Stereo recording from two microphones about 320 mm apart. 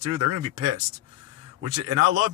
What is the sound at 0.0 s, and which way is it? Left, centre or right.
Speech, right.